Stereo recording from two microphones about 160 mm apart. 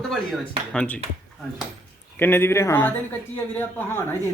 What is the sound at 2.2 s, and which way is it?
A man's voice, 15° left (ahead or behind).